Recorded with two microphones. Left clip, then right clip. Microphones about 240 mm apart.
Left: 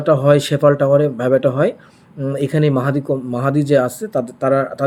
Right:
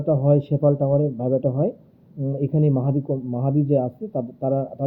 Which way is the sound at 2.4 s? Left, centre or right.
Centre.